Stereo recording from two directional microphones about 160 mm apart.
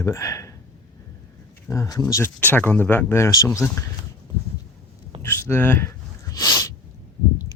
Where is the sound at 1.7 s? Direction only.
20° left (ahead or behind).